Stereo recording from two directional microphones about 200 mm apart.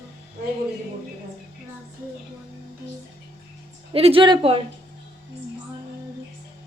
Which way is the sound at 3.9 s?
30° right (ahead or behind).